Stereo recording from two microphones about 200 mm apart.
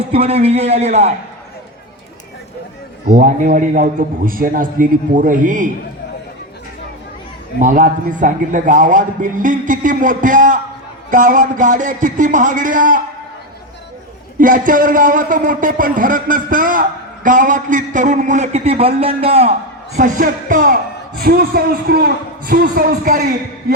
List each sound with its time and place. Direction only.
0.0 s a man's voice: 30° right (ahead or behind)
3.1 s a man's voice: 40° right (ahead or behind)
7.6 s a man's voice: 40° right (ahead or behind)
14.3 s a man's voice: 40° right (ahead or behind)